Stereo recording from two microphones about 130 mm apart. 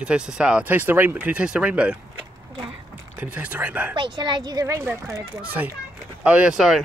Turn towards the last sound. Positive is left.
turn(degrees=-5)  # may be behind; listen again after turning